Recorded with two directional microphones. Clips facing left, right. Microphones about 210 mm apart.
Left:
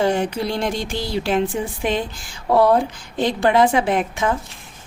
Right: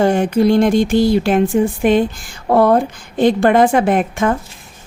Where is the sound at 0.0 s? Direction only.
50° right (ahead or behind).